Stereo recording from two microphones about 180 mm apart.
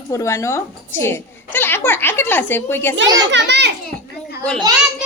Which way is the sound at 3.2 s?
75° right (ahead or behind).